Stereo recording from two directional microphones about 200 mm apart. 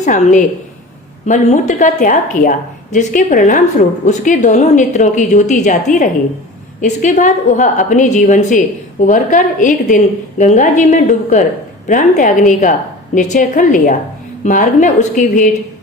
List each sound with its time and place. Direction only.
0.0 s a woman's voice: 40° left (ahead or behind)